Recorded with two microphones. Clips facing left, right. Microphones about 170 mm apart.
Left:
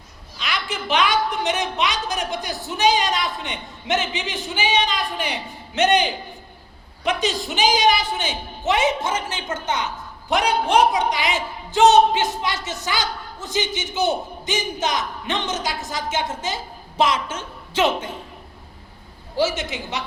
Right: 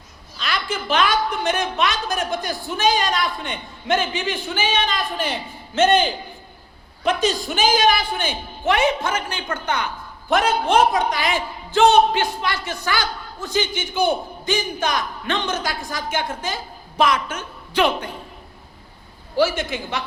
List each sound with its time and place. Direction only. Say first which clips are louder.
0.3 s a sound: right 2 dB; 20° left (ahead or behind)
1.1 s a man's voice: even; 20° left (ahead or behind)
13.7 s a man's voice: right 1 dB; 55° right (ahead or behind)
14.1 s a man's voice: right 2 dB; 20° left (ahead or behind)
19.5 s a man's voice: right 2 dB; 20° left (ahead or behind)